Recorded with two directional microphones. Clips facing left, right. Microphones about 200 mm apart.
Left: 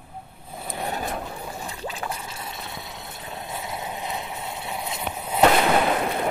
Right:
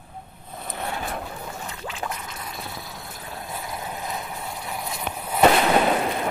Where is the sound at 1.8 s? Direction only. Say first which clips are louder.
Even; 30° left (ahead or behind).